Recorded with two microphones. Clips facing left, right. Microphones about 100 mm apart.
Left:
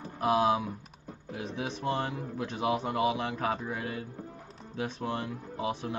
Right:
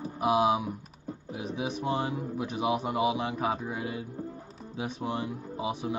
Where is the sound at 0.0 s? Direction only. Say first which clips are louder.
Right 1 dB; 15° right (ahead or behind).